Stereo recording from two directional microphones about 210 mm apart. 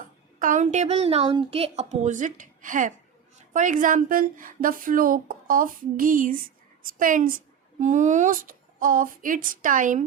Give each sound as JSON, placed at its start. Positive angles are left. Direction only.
{"t": 0.3, "sound": "speech", "side_deg": -40}